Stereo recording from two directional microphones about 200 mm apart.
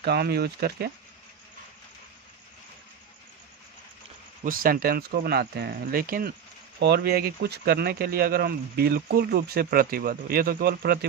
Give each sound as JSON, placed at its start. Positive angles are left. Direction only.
{"t": 0.0, "sound": "speech", "side_deg": -55}
{"t": 4.5, "sound": "speech", "side_deg": -45}